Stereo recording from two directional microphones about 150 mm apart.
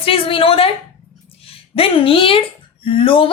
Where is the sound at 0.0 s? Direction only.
40° left (ahead or behind).